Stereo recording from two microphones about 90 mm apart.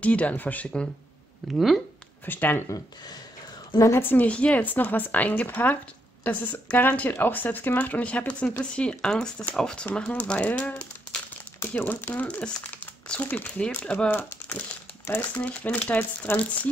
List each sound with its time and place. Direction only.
0.0 s speech: 15° left (ahead or behind)
1.4 s speech: centre (ahead or behind)
2.2 s a woman's voice: 20° left (ahead or behind)
3.7 s a woman's voice: 35° left (ahead or behind)
4.0 s a woman's voice: 20° left (ahead or behind)